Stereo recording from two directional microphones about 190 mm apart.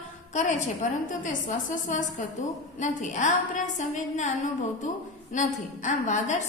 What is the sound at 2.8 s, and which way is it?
A woman's voice, 40° left (ahead or behind).